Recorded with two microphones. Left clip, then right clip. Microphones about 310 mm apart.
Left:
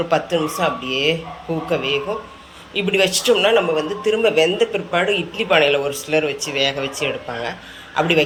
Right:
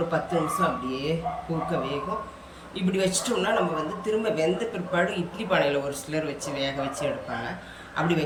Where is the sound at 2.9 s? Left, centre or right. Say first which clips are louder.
Left 10 dB; centre.